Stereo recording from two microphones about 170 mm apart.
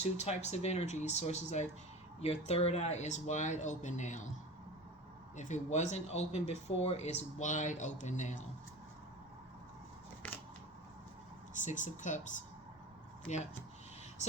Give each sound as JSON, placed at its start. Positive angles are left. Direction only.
{"t": 0.0, "sound": "speech", "side_deg": 40}
{"t": 5.4, "sound": "speech", "side_deg": 45}
{"t": 10.2, "sound": "scissors", "side_deg": 10}
{"t": 11.5, "sound": "speech", "side_deg": 50}